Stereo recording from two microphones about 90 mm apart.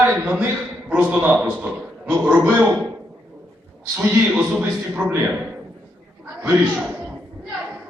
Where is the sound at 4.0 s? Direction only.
20° right (ahead or behind).